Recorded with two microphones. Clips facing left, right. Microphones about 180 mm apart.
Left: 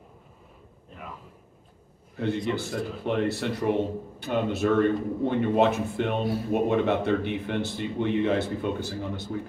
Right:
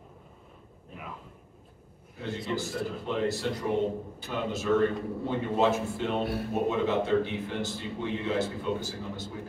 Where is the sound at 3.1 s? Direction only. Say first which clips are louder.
Left 4 dB; 65° left (ahead or behind).